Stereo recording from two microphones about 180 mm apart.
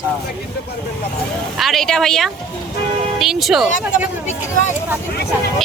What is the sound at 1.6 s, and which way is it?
Speech, centre (ahead or behind).